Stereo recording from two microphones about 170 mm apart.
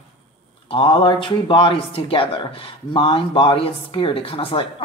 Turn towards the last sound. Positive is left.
turn(degrees=30)  # may be behind; listen again after turning